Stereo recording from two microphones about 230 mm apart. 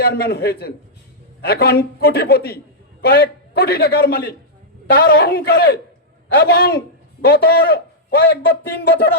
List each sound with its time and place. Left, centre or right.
0.0 s a man's voice: left